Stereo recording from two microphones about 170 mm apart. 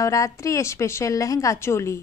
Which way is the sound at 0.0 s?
20° left (ahead or behind).